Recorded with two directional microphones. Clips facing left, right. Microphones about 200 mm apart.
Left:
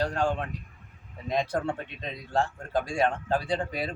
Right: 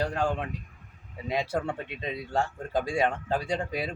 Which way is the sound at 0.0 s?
15° right (ahead or behind).